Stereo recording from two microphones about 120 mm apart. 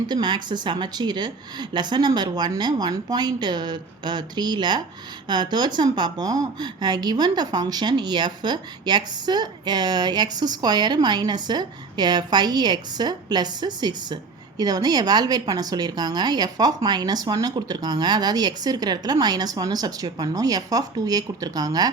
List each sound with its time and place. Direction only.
0.1 s a woman's voice: 40° right (ahead or behind)